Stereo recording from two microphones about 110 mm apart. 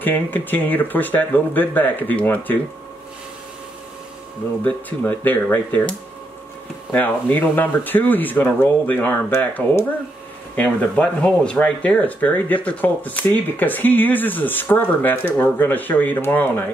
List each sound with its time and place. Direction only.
0.0 s speech: 15° left (ahead or behind)
4.6 s speech: 15° left (ahead or behind)